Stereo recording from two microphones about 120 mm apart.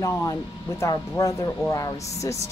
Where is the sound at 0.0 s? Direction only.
25° left (ahead or behind).